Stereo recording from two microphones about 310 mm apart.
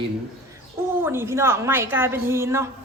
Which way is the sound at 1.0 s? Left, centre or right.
Centre.